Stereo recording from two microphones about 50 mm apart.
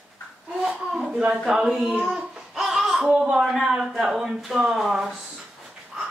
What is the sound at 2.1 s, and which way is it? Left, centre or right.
Babbling, centre.